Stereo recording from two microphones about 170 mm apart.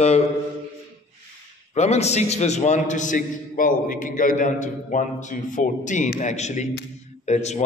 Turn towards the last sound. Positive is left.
turn(degrees=40)  # may be behind; listen again after turning